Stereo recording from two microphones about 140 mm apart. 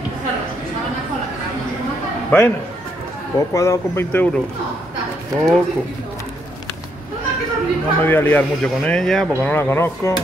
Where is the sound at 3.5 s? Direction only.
20° left (ahead or behind).